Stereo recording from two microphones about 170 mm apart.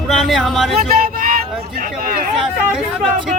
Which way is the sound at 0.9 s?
55° right (ahead or behind).